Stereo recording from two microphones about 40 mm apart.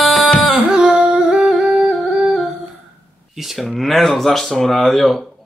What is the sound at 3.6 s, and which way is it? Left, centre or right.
Speech, centre.